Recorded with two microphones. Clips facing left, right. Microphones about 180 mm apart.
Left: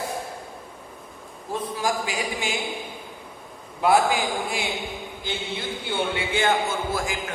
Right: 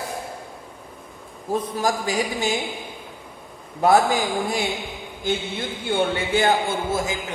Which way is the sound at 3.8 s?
40° right (ahead or behind).